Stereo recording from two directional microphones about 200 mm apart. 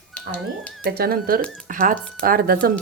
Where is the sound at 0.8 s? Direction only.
50° right (ahead or behind).